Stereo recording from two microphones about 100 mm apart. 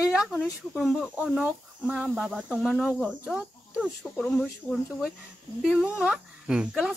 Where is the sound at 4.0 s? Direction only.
Centre (ahead or behind).